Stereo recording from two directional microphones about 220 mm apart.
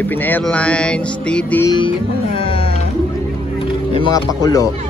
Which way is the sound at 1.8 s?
25° left (ahead or behind).